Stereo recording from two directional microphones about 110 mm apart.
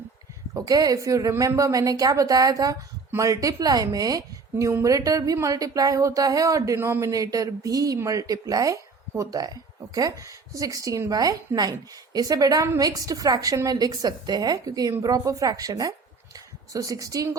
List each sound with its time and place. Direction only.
0.5 s a woman's voice: 35° right (ahead or behind)